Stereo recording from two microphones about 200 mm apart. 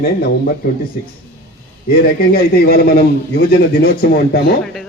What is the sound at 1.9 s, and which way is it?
A man's voice, 50° left (ahead or behind).